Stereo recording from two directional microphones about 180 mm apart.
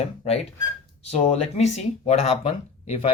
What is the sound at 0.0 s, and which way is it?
Speech, 35° left (ahead or behind).